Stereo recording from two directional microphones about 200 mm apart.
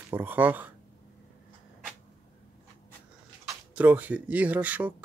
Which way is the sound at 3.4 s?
5° right (ahead or behind).